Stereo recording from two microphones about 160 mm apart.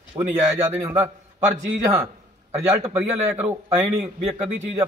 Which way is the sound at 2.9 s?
10° right (ahead or behind).